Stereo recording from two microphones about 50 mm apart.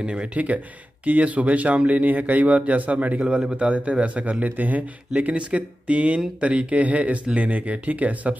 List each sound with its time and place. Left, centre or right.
0.0 s speech: right
5.2 s speech: right